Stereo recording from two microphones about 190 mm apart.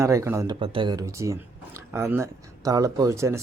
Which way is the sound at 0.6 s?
25° right (ahead or behind).